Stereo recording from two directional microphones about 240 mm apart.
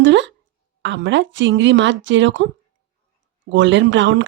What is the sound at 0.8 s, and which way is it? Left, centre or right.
Speech, right.